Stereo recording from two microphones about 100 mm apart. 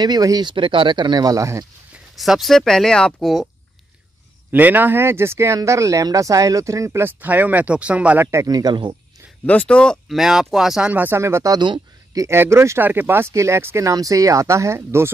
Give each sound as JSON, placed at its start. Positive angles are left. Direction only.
{"t": 0.0, "sound": "speech", "side_deg": -40}
{"t": 2.1, "sound": "speech", "side_deg": 0}
{"t": 4.5, "sound": "speech", "side_deg": -20}
{"t": 8.3, "sound": "speech", "side_deg": -35}
{"t": 9.5, "sound": "speech", "side_deg": 10}
{"t": 10.0, "sound": "speech", "side_deg": -5}
{"t": 10.9, "sound": "speech", "side_deg": -20}
{"t": 11.5, "sound": "a sound", "side_deg": -45}
{"t": 12.2, "sound": "speech", "side_deg": -25}